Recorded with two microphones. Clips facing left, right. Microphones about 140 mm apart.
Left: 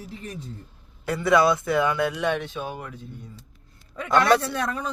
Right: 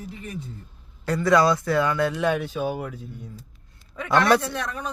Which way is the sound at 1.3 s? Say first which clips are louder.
Even; 20° left (ahead or behind).